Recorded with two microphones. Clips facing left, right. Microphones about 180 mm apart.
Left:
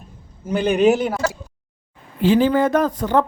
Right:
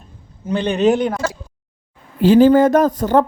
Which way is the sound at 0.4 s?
10° left (ahead or behind).